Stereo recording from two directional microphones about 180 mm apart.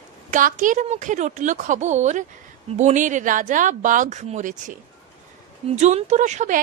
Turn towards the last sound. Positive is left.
turn(degrees=-40)  # may be behind; listen again after turning